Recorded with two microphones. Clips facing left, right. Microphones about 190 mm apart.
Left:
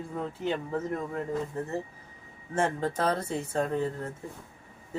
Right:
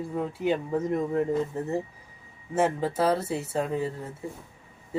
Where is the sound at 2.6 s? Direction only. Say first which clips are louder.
Right 3 dB; 5° right (ahead or behind).